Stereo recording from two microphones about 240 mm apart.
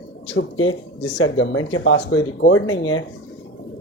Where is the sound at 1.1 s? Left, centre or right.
Left.